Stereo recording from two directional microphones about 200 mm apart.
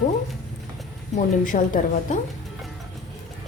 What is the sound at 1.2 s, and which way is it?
Speech, 40° left (ahead or behind).